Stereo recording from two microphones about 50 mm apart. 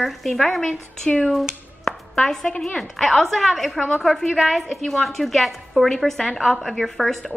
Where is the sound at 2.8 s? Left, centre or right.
Centre.